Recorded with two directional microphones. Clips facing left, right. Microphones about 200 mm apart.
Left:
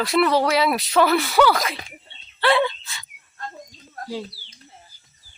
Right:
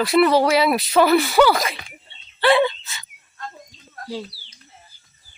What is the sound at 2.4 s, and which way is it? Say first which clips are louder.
Dog: right 3 dB; centre (ahead or behind).